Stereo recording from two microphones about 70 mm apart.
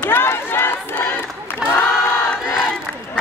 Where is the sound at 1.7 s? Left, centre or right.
Left.